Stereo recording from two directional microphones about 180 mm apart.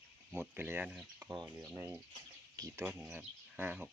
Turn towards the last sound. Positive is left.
turn(degrees=-10)  # may be behind; listen again after turning